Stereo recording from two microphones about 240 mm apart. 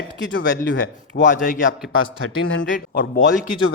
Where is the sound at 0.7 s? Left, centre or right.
Left.